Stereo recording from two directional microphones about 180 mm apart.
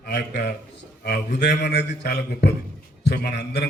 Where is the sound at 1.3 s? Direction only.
65° left (ahead or behind).